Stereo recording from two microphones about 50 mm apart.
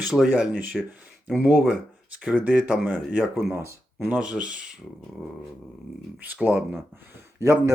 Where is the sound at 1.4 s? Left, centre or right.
Right.